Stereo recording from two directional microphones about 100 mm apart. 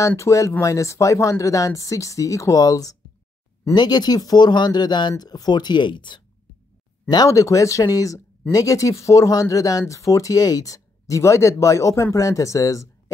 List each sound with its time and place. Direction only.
0.0 s speech: 30° left (ahead or behind); by 6.2 s 50° left (ahead or behind)
7.1 s speech: 35° left (ahead or behind)